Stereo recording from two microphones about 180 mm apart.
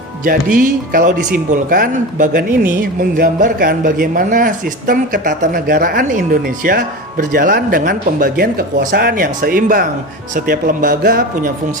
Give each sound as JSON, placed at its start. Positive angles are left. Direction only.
{"t": 0.3, "sound": "a man's voice", "side_deg": -50}